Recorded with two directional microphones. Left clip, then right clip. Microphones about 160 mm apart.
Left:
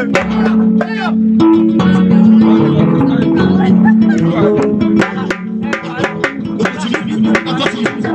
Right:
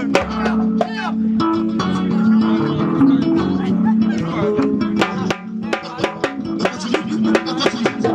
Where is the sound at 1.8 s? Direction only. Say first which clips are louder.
Left 8 dB; 65° left (ahead or behind).